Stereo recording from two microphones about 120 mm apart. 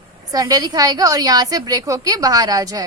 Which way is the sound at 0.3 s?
30° right (ahead or behind).